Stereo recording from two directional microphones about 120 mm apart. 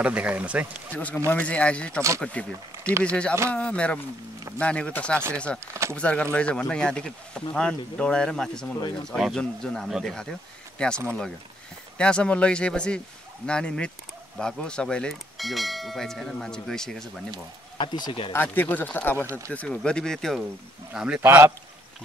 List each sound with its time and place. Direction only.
0.0 s speech: 10° right (ahead or behind)
0.9 s speech: 15° left (ahead or behind)
2.0 s speech: 25° right (ahead or behind)
2.2 s speech: 10° left (ahead or behind)
17.7 s speech: 40° left (ahead or behind)
18.3 s speech: 15° left (ahead or behind)
19.1 s speech: 25° right (ahead or behind)
19.5 s speech: 10° left (ahead or behind); by 21.5 s 15° right (ahead or behind)